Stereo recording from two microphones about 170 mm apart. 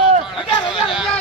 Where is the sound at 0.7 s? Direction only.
30° left (ahead or behind).